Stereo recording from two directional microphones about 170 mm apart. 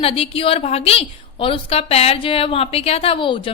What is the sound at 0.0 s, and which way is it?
A woman's voice, 35° left (ahead or behind).